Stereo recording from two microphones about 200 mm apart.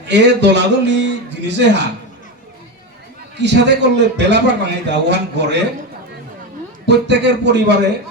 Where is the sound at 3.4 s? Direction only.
60° right (ahead or behind).